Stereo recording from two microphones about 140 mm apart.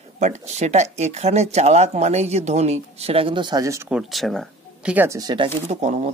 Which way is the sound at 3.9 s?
Centre (ahead or behind).